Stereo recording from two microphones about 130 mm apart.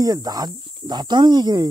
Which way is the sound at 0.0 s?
30° right (ahead or behind).